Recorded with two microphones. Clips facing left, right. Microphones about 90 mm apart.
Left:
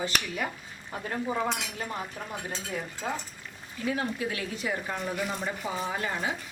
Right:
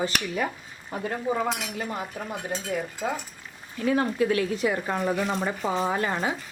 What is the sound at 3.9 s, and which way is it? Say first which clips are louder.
Speech: right 8 dB; 55° right (ahead or behind).